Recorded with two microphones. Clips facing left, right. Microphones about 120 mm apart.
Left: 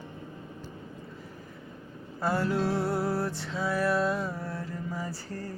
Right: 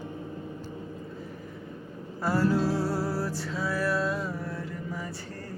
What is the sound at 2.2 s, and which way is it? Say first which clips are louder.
Music: right 2 dB; 20° left (ahead or behind).